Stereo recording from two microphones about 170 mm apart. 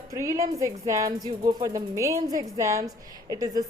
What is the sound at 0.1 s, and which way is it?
A woman's voice, 15° right (ahead or behind).